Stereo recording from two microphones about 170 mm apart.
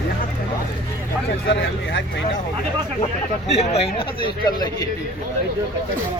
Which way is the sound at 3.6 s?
40° left (ahead or behind).